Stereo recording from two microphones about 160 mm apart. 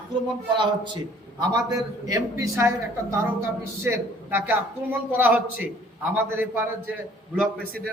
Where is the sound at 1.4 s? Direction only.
25° right (ahead or behind).